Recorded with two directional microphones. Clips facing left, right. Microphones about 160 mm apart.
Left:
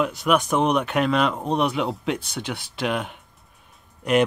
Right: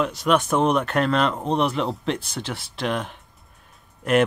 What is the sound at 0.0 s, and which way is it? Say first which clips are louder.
Speech: even; centre (ahead or behind).